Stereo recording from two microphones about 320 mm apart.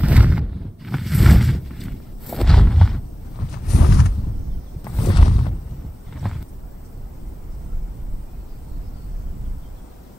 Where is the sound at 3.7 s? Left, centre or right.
Left.